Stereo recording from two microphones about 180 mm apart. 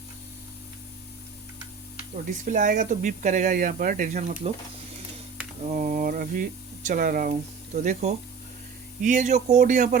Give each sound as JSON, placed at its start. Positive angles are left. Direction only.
{"t": 2.4, "sound": "speech", "side_deg": -45}
{"t": 5.6, "sound": "speech", "side_deg": -45}